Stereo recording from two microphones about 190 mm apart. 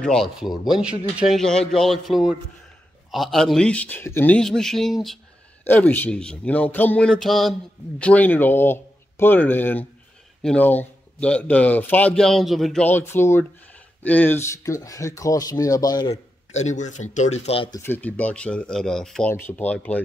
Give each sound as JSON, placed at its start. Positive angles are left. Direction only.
{"t": 0.0, "sound": "a man's voice", "side_deg": 0}
{"t": 16.5, "sound": "speech", "side_deg": 40}
{"t": 17.7, "sound": "a man's voice", "side_deg": 10}